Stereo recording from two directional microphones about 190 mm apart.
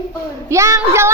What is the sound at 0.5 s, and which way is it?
Speech, 15° right (ahead or behind).